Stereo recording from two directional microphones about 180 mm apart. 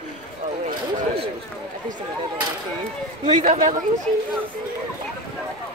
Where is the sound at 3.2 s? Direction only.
40° right (ahead or behind).